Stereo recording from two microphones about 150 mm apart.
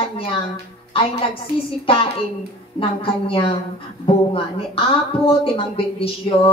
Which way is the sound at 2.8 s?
35° left (ahead or behind).